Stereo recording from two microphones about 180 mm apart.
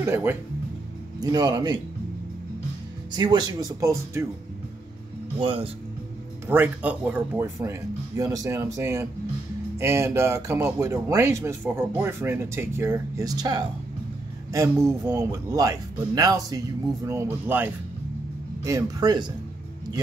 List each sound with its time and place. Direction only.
0.0 s speech: 10° right (ahead or behind)
1.2 s speech: 25° right (ahead or behind)
3.1 s speech: 25° right (ahead or behind)
5.4 s speech: 30° right (ahead or behind)
6.4 s speech: 10° right (ahead or behind)
18.7 s speech: 20° right (ahead or behind)